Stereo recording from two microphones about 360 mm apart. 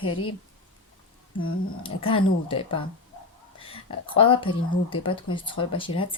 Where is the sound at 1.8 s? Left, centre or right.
Centre.